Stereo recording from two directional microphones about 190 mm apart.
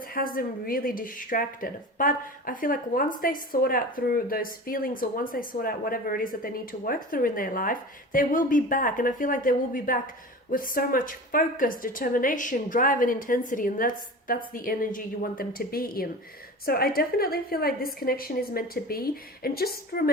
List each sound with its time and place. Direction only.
0.0 s speech: 50° left (ahead or behind)